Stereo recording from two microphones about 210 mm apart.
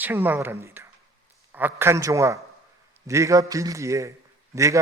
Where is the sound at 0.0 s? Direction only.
10° right (ahead or behind).